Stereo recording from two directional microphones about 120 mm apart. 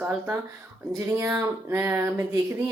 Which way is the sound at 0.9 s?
25° right (ahead or behind).